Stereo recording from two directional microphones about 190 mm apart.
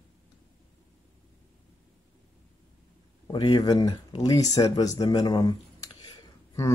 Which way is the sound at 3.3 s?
25° left (ahead or behind).